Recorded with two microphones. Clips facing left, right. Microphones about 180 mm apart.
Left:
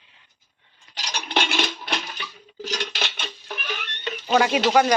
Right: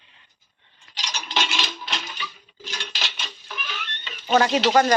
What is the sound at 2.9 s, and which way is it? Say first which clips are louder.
Rodents: left 4 dB; 60° left (ahead or behind).